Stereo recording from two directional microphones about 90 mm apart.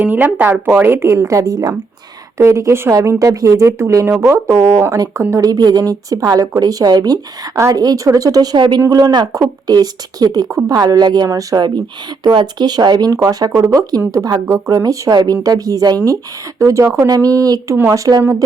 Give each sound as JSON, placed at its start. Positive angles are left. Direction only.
{"t": 0.0, "sound": "a woman's voice", "side_deg": -15}
{"t": 5.4, "sound": "a woman's voice", "side_deg": -45}
{"t": 8.5, "sound": "speech", "side_deg": -55}
{"t": 8.9, "sound": "a woman's voice", "side_deg": -45}
{"t": 12.2, "sound": "speech", "side_deg": -60}
{"t": 13.1, "sound": "a woman's voice", "side_deg": -40}